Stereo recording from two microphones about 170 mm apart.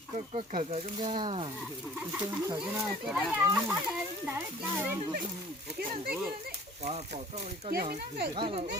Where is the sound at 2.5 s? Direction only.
20° right (ahead or behind).